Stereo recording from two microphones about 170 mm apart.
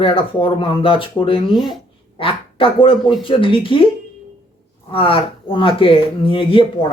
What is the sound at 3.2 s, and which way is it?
Speech, 30° left (ahead or behind).